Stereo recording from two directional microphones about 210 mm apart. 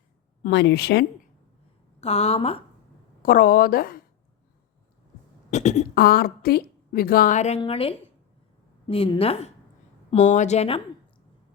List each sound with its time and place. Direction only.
0.4 s a woman's voice: 55° left (ahead or behind)
2.0 s a woman's voice: 30° left (ahead or behind)
3.2 s a woman's voice: 45° left (ahead or behind)
5.5 s throat clearing: 35° left (ahead or behind)
5.9 s a woman's voice: 45° left (ahead or behind); by 10.8 s 30° left (ahead or behind)